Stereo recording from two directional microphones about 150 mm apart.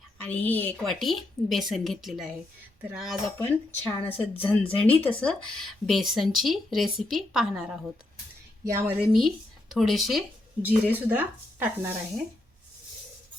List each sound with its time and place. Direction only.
0.2 s a woman's voice: 10° left (ahead or behind)
0.8 s speech: centre (ahead or behind)
3.3 s a woman's voice: 15° left (ahead or behind); by 7.8 s centre (ahead or behind)
8.6 s a woman's voice: 20° right (ahead or behind)
9.0 s speech: centre (ahead or behind)
10.6 s speech: 10° right (ahead or behind)